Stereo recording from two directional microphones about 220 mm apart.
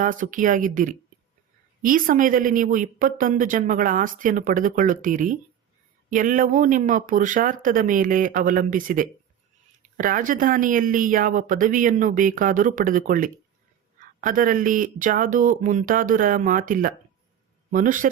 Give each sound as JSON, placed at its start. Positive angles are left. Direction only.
{"t": 0.0, "sound": "a woman's voice", "side_deg": -35}